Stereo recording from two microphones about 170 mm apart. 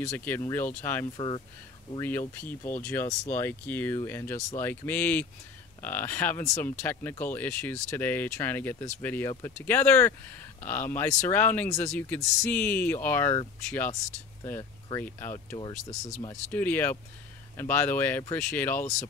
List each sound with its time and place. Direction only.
0.0 s speech: 10° left (ahead or behind)
1.1 s speech: 30° left (ahead or behind)
2.0 s speech: 10° left (ahead or behind)
15.3 s speech: 25° left (ahead or behind)
16.5 s speech: 10° left (ahead or behind)